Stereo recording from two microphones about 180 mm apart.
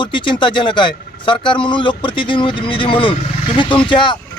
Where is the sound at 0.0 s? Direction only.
25° left (ahead or behind).